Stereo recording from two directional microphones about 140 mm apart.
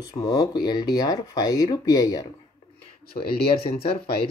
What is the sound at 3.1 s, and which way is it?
Speech, 40° left (ahead or behind).